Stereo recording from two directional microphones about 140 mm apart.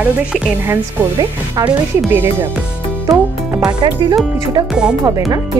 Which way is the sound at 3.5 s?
25° right (ahead or behind).